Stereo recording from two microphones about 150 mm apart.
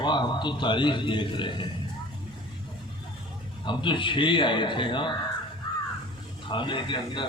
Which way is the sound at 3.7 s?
35° left (ahead or behind).